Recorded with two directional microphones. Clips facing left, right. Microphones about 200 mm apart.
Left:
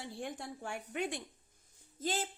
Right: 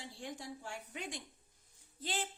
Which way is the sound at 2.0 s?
45° left (ahead or behind).